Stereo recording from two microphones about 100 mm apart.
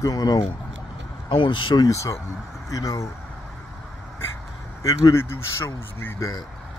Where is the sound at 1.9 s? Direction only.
30° left (ahead or behind).